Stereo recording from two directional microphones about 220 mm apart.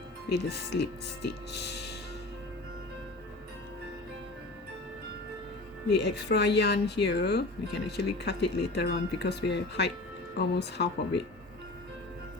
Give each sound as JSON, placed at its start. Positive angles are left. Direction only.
{"t": 0.3, "sound": "speech", "side_deg": 45}
{"t": 5.9, "sound": "speech", "side_deg": 50}